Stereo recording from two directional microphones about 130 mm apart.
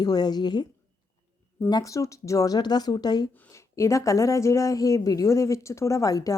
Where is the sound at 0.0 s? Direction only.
30° left (ahead or behind).